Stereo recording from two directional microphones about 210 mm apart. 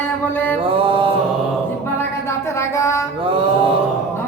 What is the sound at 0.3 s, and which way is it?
Mantra, 10° left (ahead or behind).